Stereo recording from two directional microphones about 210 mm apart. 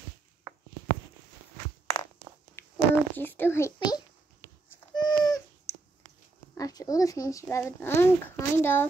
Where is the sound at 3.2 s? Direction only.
10° left (ahead or behind).